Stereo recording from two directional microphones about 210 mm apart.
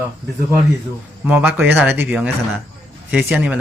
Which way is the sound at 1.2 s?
5° right (ahead or behind).